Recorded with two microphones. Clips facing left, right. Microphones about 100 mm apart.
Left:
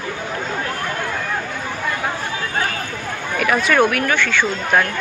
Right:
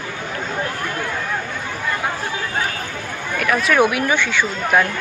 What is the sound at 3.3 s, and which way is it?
Speech, centre (ahead or behind).